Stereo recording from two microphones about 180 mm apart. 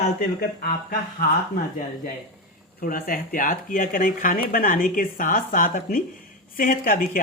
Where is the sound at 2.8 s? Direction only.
50° left (ahead or behind).